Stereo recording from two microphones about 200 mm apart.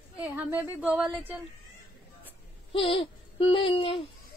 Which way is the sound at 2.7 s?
25° left (ahead or behind).